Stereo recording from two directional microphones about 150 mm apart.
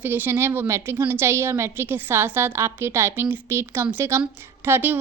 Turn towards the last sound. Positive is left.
turn(degrees=-15)  # may be behind; listen again after turning